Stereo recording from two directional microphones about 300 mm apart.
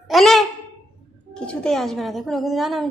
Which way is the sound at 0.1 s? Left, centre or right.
Centre.